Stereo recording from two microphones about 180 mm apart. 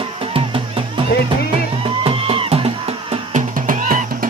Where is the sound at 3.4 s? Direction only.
45° right (ahead or behind).